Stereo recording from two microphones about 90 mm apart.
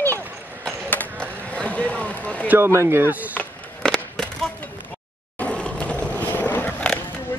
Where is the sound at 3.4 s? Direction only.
10° left (ahead or behind).